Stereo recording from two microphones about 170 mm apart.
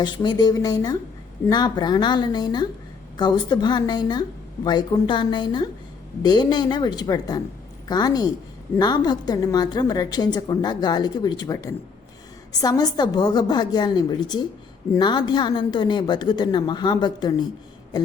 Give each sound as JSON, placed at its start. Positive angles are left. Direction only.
{"t": 0.0, "sound": "a woman's voice", "side_deg": 25}